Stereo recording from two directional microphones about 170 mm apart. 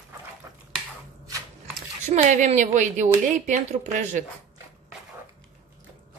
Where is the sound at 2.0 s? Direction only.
45° right (ahead or behind).